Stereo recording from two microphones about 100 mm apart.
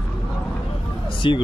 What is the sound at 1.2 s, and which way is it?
Speech, 55° left (ahead or behind).